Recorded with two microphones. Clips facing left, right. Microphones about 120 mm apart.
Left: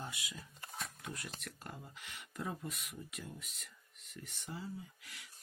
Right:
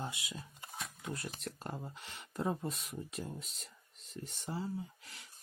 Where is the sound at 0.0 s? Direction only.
25° right (ahead or behind).